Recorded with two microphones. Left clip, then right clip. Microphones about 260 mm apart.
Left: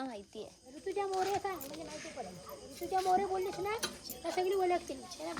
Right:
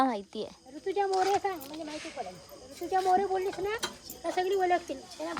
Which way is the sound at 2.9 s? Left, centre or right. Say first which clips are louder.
Right 5 dB; right.